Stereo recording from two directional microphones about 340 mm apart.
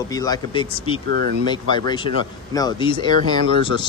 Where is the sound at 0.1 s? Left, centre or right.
Centre.